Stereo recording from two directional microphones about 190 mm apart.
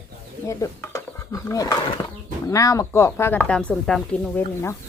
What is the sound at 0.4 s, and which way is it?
Speech, 15° left (ahead or behind).